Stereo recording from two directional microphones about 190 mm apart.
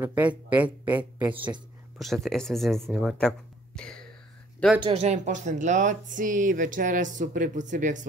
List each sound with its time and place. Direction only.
0.0 s speech: 10° right (ahead or behind)
4.8 s speech: 35° right (ahead or behind)